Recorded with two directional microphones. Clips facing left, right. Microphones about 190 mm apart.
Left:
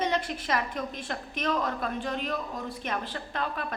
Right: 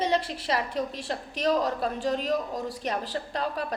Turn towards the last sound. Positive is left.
turn(degrees=-35)  # may be behind; listen again after turning